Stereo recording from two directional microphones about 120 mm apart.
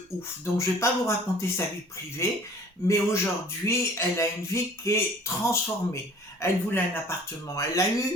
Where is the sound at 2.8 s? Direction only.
25° left (ahead or behind).